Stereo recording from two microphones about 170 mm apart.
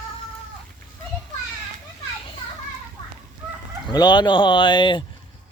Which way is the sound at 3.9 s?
25° left (ahead or behind).